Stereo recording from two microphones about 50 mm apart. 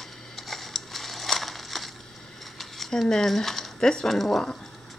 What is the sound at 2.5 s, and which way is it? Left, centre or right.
Speech, centre.